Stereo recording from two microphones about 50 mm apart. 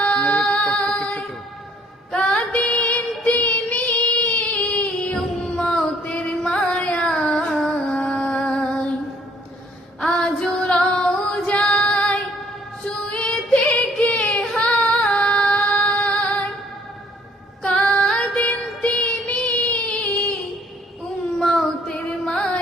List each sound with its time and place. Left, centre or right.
0.3 s music: centre
2.1 s child singing: left
6.1 s music: centre
7.9 s music: centre
10.1 s female singing: centre
13.7 s carnatic music: left
14.6 s female singing: centre
17.6 s music: left
18.0 s female singing: centre
18.4 s child singing: left
21.3 s music: centre